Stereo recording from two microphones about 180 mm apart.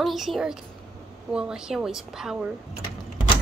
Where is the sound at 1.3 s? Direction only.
5° right (ahead or behind).